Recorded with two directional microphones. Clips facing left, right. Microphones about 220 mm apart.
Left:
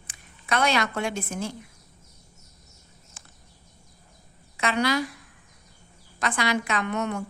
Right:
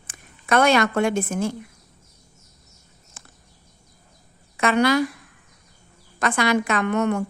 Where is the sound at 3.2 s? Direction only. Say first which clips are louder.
Right 6 dB; 50° right (ahead or behind).